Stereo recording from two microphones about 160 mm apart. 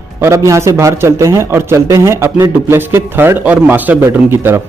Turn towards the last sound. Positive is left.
turn(degrees=-15)  # may be behind; listen again after turning